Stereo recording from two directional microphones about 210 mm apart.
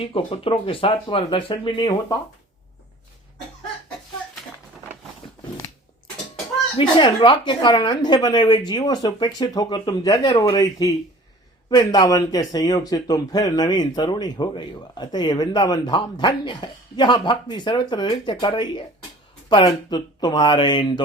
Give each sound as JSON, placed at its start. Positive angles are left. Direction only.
{"t": 0.0, "sound": "speech", "side_deg": 25}
{"t": 6.7, "sound": "speech", "side_deg": 25}